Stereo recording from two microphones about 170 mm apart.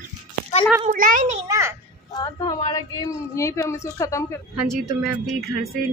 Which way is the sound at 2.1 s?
20° left (ahead or behind).